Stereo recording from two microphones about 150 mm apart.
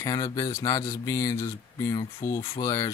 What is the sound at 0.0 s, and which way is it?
Speech, 25° left (ahead or behind).